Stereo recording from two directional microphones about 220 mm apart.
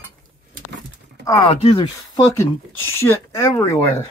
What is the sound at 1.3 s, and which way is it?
Speech, 25° left (ahead or behind).